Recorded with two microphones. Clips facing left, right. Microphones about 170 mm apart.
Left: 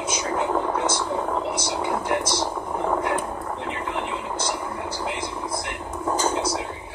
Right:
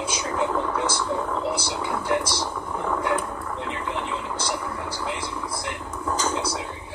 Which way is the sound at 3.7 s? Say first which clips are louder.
Left 1 dB; 35° left (ahead or behind).